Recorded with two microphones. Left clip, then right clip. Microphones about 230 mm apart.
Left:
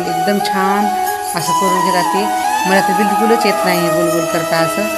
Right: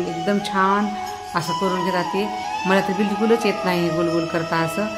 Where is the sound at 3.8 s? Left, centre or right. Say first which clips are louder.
Left 7 dB; left.